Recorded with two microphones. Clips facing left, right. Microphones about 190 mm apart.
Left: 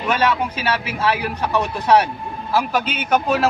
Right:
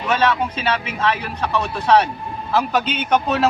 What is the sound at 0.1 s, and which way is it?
A man's voice, 10° left (ahead or behind).